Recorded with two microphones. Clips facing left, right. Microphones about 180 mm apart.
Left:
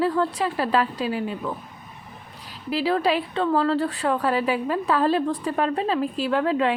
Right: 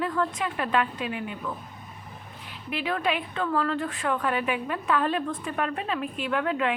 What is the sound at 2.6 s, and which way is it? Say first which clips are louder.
A woman's voice: left 6 dB; 35° left (ahead or behind).